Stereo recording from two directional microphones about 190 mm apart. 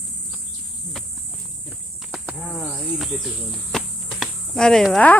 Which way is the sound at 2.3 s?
5° left (ahead or behind).